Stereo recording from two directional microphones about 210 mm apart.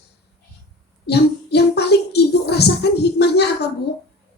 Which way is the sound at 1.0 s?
50° left (ahead or behind).